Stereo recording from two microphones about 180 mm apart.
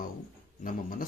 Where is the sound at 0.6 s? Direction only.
50° left (ahead or behind).